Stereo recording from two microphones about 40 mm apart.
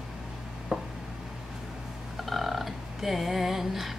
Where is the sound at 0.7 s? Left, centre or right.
Centre.